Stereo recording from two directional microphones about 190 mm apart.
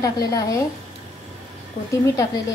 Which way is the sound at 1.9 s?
15° left (ahead or behind).